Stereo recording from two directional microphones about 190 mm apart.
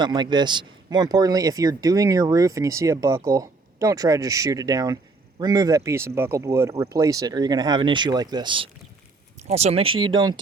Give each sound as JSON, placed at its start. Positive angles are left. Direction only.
{"t": 0.0, "sound": "speech", "side_deg": -20}